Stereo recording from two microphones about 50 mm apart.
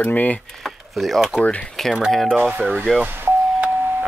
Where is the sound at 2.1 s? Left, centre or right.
Centre.